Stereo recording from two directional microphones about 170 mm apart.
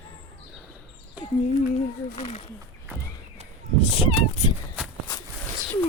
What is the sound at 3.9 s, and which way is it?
Speech, 30° left (ahead or behind).